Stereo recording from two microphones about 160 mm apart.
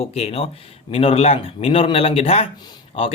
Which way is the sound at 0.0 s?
40° left (ahead or behind).